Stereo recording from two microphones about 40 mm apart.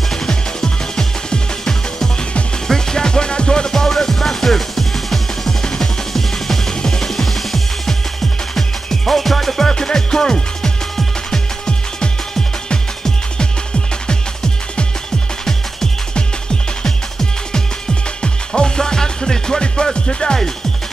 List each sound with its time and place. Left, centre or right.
0.3 s music: centre
12.0 s music: left
14.0 s music: left
16.8 s music: centre